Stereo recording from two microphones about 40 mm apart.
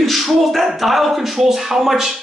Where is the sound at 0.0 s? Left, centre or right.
Centre.